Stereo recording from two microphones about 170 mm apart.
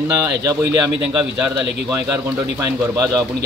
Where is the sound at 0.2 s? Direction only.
20° right (ahead or behind).